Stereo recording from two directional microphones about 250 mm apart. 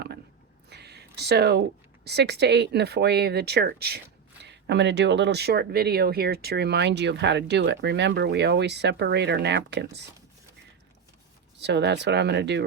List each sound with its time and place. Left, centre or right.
0.7 s a sound: right
2.0 s speech: right
11.6 s speech: right